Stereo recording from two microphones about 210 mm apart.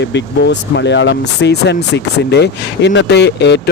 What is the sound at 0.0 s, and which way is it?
Speech, 55° left (ahead or behind).